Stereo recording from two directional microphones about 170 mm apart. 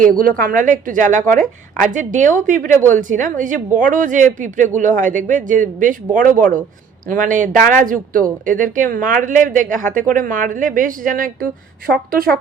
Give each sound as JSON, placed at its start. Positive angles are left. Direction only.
{"t": 0.2, "sound": "a woman's voice", "side_deg": -55}